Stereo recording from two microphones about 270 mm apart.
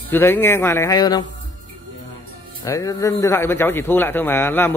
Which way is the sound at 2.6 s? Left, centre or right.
Centre.